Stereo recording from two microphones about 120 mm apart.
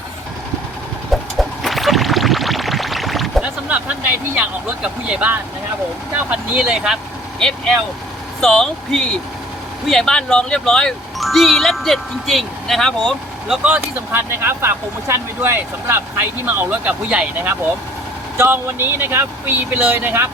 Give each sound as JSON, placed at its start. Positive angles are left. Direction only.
{"t": 1.1, "sound": "music", "side_deg": 0}
{"t": 3.4, "sound": "a sound", "side_deg": -10}
{"t": 4.4, "sound": "speech", "side_deg": -10}
{"t": 8.4, "sound": "speech", "side_deg": 5}
{"t": 13.5, "sound": "speech", "side_deg": -15}